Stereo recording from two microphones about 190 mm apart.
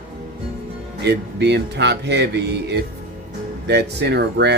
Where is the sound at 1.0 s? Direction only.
60° right (ahead or behind).